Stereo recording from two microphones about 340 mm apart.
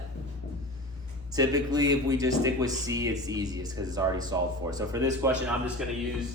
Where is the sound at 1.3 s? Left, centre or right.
Centre.